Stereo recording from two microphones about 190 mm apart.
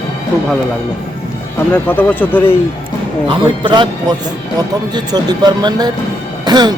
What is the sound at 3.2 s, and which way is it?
Speech, 25° right (ahead or behind).